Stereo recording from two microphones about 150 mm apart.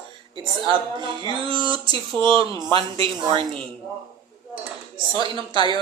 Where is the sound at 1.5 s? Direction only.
35° right (ahead or behind).